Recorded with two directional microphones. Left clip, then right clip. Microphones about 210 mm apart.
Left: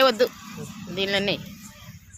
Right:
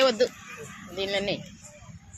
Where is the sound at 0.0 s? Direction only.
20° left (ahead or behind).